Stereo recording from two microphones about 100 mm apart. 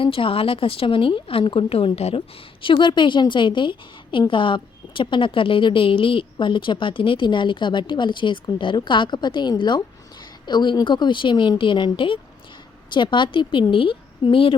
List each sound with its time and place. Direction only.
0.0 s a woman's voice: 60° left (ahead or behind)